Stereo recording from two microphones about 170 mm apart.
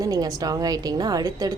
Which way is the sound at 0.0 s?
20° right (ahead or behind).